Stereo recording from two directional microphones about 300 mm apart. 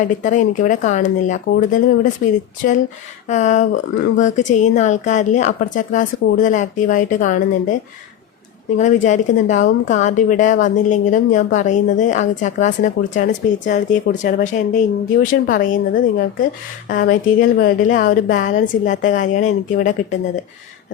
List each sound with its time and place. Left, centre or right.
0.0 s a woman's voice: left
8.8 s a woman's voice: left